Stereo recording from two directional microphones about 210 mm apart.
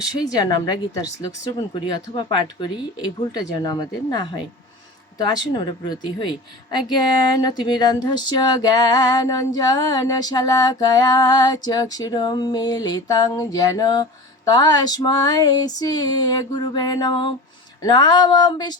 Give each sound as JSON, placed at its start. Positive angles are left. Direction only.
{"t": 0.3, "sound": "a woman's voice", "side_deg": 20}
{"t": 2.1, "sound": "a woman's voice", "side_deg": 20}